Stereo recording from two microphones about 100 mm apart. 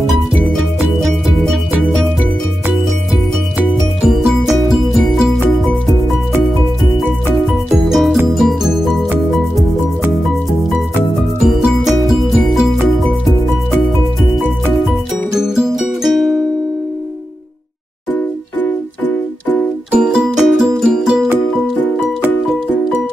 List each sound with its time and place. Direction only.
0.7 s music: centre (ahead or behind)
4.0 s music: 5° right (ahead or behind)
7.7 s music: centre (ahead or behind)
11.4 s music: 5° right (ahead or behind)
15.3 s music: 5° right (ahead or behind)
18.6 s music: 15° left (ahead or behind)
19.9 s music: 10° right (ahead or behind)